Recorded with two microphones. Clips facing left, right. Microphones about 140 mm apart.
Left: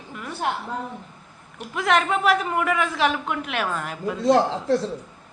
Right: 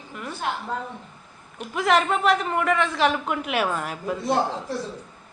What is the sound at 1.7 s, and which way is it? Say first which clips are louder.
A man's voice: even; centre (ahead or behind).